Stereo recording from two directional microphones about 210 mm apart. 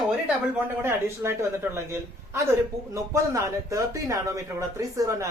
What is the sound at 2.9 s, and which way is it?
A man's voice, 15° right (ahead or behind).